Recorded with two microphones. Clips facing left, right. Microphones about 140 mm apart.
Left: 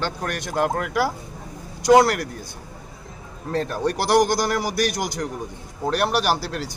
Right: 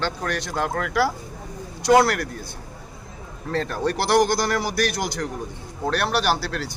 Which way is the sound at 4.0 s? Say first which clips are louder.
Left 1 dB; 45° left (ahead or behind).